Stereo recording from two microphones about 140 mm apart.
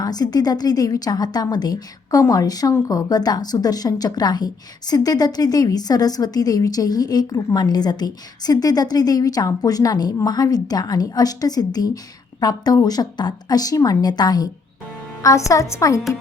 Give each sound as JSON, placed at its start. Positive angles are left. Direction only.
{"t": 0.0, "sound": "a woman's voice", "side_deg": 30}